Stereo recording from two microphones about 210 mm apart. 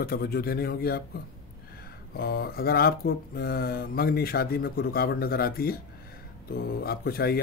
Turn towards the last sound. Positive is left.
turn(degrees=45)  # may be behind; listen again after turning